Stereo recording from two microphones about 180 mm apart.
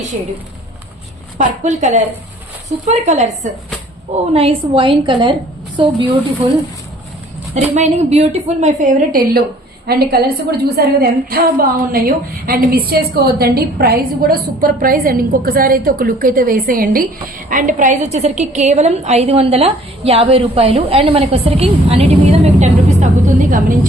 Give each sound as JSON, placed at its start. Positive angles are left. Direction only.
{"t": 1.4, "sound": "a woman's voice", "side_deg": -40}
{"t": 7.5, "sound": "a woman's voice", "side_deg": -40}
{"t": 9.8, "sound": "a woman's voice", "side_deg": -60}